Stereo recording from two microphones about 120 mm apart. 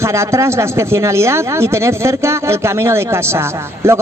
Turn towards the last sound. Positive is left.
turn(degrees=-20)  # may be behind; listen again after turning